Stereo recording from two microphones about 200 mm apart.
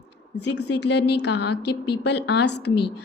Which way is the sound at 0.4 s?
60° left (ahead or behind).